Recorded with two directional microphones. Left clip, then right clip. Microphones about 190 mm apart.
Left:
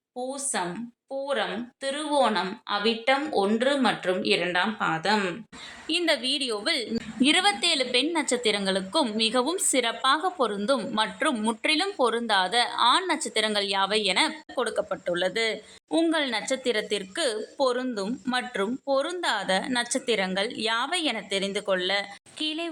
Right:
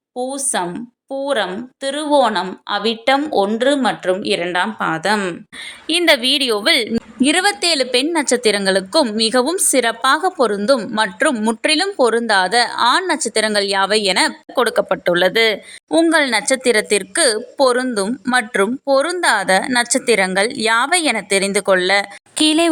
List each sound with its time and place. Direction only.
0.2 s a woman's voice: 35° right (ahead or behind)
6.9 s a woman's voice: 30° right (ahead or behind); by 22.7 s 60° right (ahead or behind)